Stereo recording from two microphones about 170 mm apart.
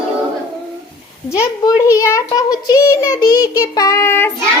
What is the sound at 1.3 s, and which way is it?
A child's voice, 20° left (ahead or behind).